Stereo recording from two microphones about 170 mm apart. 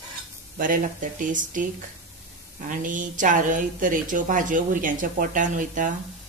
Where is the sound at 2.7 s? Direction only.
50° right (ahead or behind).